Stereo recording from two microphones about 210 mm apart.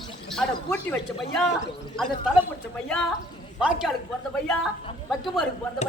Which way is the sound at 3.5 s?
Centre (ahead or behind).